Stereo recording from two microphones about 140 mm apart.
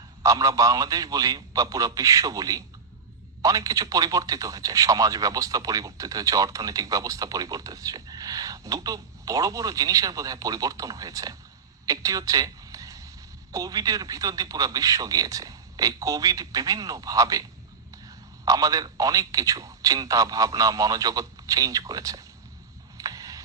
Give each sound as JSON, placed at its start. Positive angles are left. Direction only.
{"t": 0.2, "sound": "speech", "side_deg": -25}
{"t": 18.4, "sound": "speech", "side_deg": -25}
{"t": 23.0, "sound": "a sound", "side_deg": -25}